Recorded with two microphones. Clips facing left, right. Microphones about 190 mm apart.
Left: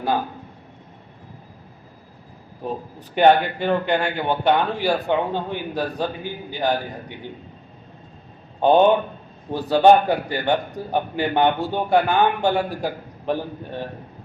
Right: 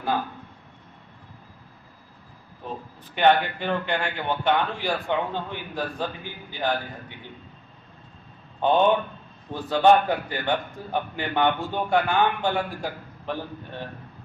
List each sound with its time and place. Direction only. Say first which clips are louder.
2.6 s a man's voice: left 7 dB; 45° left (ahead or behind)
8.6 s a man's voice: left 5 dB; 40° left (ahead or behind)